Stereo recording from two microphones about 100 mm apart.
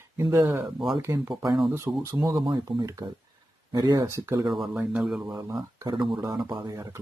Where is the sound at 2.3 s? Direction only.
50° right (ahead or behind); by 4.5 s 30° right (ahead or behind).